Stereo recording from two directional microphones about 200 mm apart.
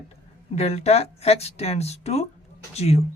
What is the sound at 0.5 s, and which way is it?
Speech, 30° left (ahead or behind).